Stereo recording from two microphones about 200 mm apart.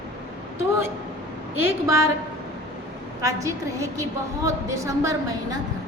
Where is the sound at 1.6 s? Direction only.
15° right (ahead or behind).